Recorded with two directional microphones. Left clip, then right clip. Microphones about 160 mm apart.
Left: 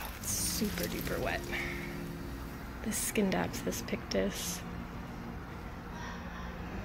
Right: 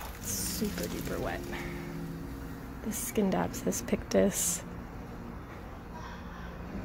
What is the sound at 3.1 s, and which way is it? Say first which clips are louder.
Speech: right 2 dB; 20° right (ahead or behind).